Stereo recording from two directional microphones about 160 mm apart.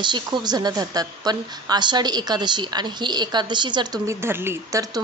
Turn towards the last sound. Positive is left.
turn(degrees=-20)  # may be behind; listen again after turning